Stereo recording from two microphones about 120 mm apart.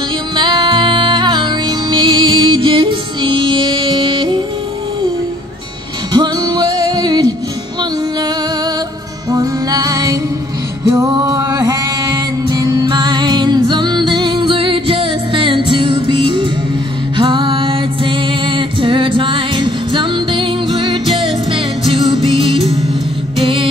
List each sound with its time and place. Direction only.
0.4 s music: 40° right (ahead or behind)
6.1 s music: 35° right (ahead or behind)
9.3 s music: 35° right (ahead or behind)